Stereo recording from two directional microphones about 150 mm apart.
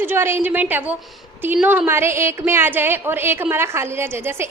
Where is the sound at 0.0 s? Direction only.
15° right (ahead or behind).